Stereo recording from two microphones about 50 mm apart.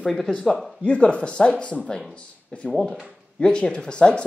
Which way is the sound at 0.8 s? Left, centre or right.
Left.